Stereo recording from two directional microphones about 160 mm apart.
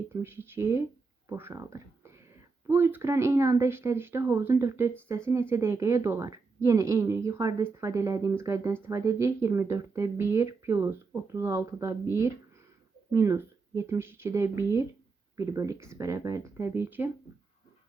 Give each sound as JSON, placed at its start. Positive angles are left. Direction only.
{"t": 0.1, "sound": "speech", "side_deg": -15}